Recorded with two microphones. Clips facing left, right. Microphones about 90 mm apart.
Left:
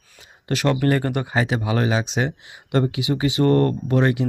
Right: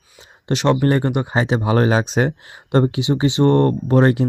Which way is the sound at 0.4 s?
25° right (ahead or behind).